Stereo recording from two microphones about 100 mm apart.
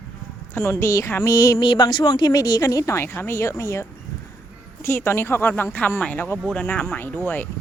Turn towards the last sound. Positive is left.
turn(degrees=20)  # may be behind; listen again after turning